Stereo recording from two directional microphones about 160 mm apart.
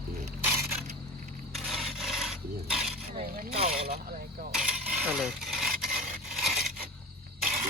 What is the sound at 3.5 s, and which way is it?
Vehicle, 35° right (ahead or behind).